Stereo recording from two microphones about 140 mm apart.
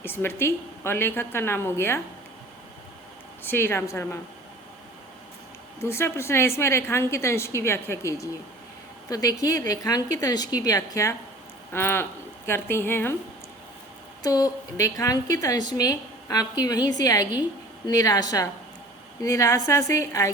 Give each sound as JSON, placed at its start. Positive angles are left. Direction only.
{"t": 0.0, "sound": "a woman's voice", "side_deg": 15}
{"t": 3.4, "sound": "a woman's voice", "side_deg": 15}
{"t": 5.8, "sound": "a woman's voice", "side_deg": 20}
{"t": 14.2, "sound": "a woman's voice", "side_deg": 25}